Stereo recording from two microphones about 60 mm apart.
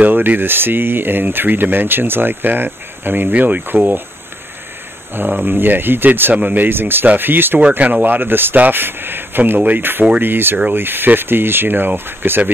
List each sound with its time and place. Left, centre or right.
0.0 s speech: right
5.3 s speech: right